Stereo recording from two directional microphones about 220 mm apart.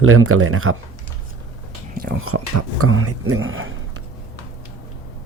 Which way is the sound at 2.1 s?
75° right (ahead or behind).